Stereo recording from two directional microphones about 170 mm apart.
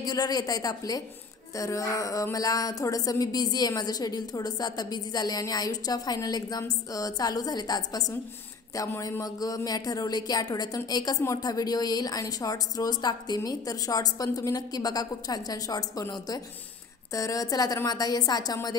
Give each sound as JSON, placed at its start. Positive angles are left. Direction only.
{"t": 0.0, "sound": "a woman's voice", "side_deg": 20}